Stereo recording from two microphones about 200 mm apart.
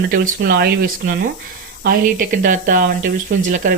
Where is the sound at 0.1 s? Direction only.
50° right (ahead or behind).